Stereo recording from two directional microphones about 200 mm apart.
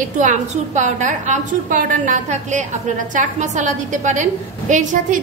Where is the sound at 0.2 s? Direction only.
35° right (ahead or behind).